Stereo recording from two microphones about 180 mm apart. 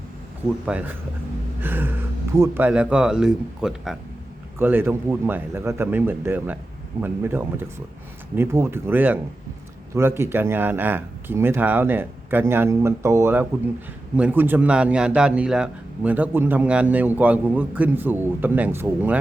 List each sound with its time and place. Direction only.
0.7 s speech: 10° right (ahead or behind)